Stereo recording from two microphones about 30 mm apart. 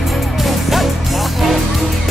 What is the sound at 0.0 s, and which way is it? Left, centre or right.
Music, centre.